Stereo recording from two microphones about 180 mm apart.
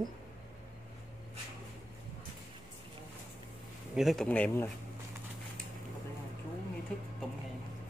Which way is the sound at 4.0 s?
Centre (ahead or behind).